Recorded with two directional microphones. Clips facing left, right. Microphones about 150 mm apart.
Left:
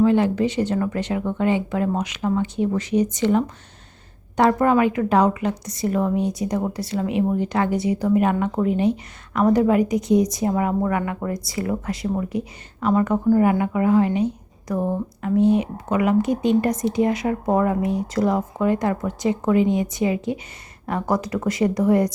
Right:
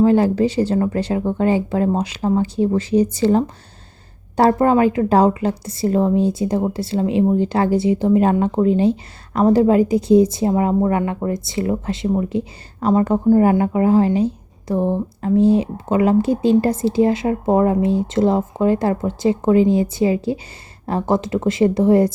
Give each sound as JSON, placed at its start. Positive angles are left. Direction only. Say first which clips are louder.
{"t": 0.0, "sound": "a woman's voice", "louder": "right 3 dB", "side_deg": -35}